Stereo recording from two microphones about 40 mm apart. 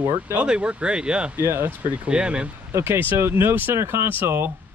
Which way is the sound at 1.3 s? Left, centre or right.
Right.